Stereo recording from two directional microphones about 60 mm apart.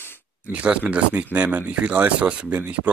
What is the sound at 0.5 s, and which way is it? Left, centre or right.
Speech, right.